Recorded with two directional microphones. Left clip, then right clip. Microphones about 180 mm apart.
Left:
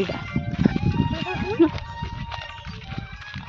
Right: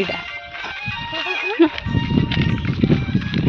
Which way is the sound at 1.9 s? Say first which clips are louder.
Right 9 dB; 15° left (ahead or behind).